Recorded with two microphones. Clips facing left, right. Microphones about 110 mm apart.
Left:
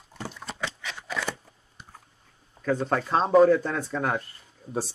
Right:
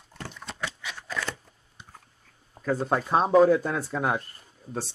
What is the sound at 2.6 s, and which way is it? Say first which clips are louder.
Speech: even; 5° right (ahead or behind).